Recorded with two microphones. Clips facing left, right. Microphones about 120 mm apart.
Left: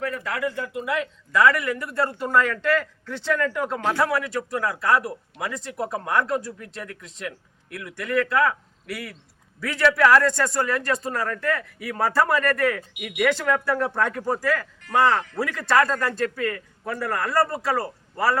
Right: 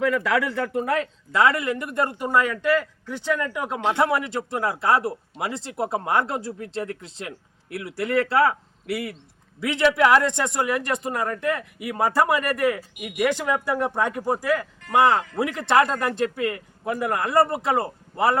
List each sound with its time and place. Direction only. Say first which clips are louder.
0.0 s speech: right 5 dB; 90° right; by 1.0 s 50° right (ahead or behind)
1.3 s speech: left 1 dB; 25° right (ahead or behind); by 3.8 s 10° right (ahead or behind)
3.8 s speech: right 3 dB; 20° right (ahead or behind)